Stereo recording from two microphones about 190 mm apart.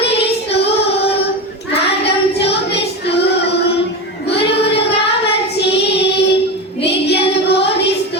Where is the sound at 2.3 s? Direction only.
60° left (ahead or behind).